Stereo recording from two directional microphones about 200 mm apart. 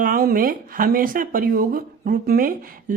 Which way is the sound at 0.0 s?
45° right (ahead or behind).